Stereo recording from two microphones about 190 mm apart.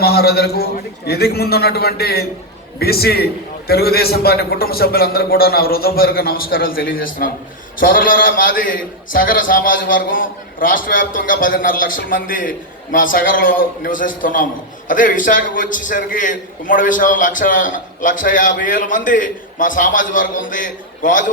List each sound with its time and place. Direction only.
0.0 s a man's voice: 55° left (ahead or behind)